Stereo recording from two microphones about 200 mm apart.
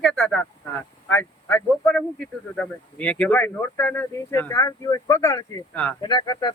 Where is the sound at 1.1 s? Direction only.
10° left (ahead or behind).